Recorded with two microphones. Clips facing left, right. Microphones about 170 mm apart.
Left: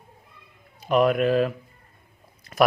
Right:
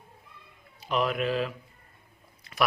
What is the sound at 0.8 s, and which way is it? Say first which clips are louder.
Speech: left 8 dB; 50° left (ahead or behind).